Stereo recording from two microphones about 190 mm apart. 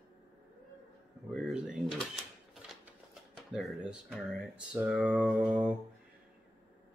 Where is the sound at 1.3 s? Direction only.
Centre (ahead or behind).